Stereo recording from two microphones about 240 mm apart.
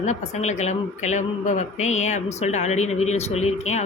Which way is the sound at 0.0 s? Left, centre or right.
Left.